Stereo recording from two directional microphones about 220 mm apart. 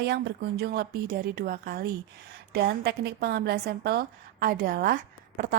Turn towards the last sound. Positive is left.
turn(degrees=-40)  # may be behind; listen again after turning